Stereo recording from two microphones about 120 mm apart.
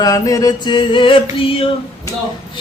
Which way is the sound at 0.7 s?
45° left (ahead or behind).